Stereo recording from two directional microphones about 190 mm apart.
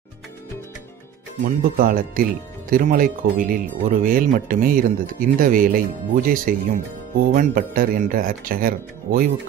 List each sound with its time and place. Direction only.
1.4 s speech: 50° right (ahead or behind)